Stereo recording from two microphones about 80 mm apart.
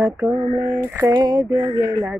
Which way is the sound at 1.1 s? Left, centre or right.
Right.